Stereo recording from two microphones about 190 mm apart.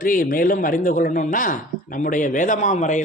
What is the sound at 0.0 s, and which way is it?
Speech, 45° left (ahead or behind).